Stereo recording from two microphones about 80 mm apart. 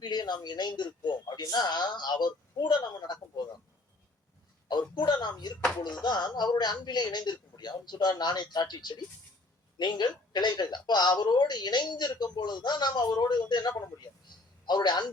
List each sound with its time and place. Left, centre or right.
0.0 s a man's voice: left
1.4 s a man's voice: left
4.7 s a man's voice: left